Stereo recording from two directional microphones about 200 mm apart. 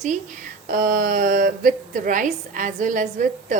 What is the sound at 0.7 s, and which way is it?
A woman's voice, 45° right (ahead or behind).